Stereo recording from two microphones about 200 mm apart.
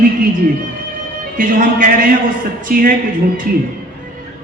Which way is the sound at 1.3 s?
45° right (ahead or behind).